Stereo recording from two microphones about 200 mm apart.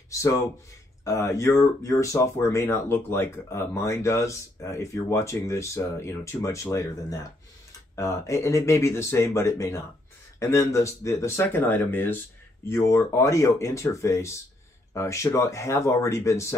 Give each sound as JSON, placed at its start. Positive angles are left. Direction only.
{"t": 0.1, "sound": "speech", "side_deg": 15}